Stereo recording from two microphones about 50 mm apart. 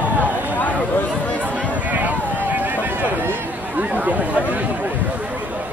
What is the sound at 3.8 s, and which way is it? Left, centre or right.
Chatter, right.